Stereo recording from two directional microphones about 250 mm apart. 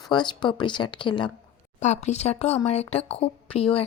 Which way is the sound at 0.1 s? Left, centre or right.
Centre.